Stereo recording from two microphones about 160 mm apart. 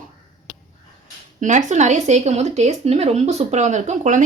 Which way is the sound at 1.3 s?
50° right (ahead or behind).